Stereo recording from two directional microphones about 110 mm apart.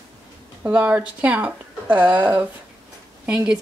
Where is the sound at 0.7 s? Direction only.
15° right (ahead or behind).